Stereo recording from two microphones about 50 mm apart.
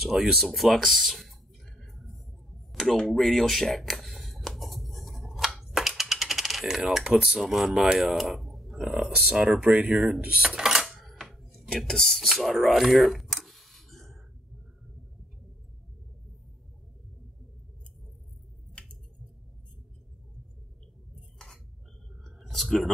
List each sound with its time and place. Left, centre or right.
0.0 s speech: centre
0.7 s a sound: centre
5.8 s typing: centre
7.3 s speech: centre
8.3 s speech: centre
9.4 s speech: centre
9.7 s speech: right
9.9 s speech: centre
10.2 s dishes: centre
10.9 s chopping: centre
11.9 s speech: centre
12.4 s a sound: centre
22.2 s clicking: centre